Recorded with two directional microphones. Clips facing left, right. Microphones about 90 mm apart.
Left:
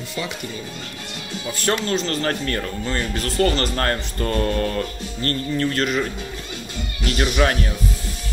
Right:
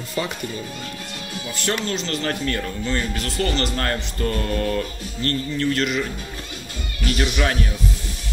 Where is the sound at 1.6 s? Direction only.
40° left (ahead or behind).